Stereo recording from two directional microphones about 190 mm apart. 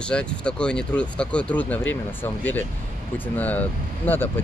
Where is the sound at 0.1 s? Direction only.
5° left (ahead or behind).